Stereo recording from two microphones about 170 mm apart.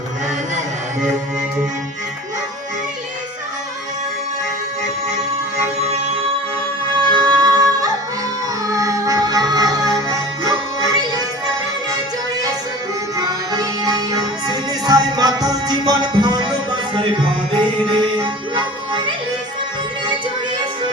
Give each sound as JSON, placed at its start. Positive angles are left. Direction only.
{"t": 7.1, "sound": "music", "side_deg": -30}
{"t": 13.1, "sound": "music", "side_deg": -25}